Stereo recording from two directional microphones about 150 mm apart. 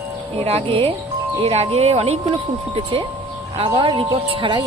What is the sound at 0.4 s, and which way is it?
Speech, 40° right (ahead or behind).